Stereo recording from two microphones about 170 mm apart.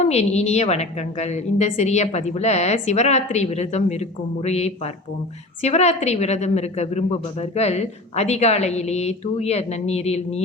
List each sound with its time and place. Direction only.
0.0 s a woman's voice: 40° left (ahead or behind)